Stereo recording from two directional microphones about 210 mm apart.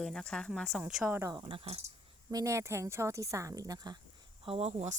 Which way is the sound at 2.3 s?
15° right (ahead or behind).